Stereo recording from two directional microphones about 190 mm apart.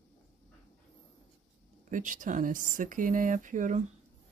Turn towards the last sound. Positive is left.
turn(degrees=-40)  # may be behind; listen again after turning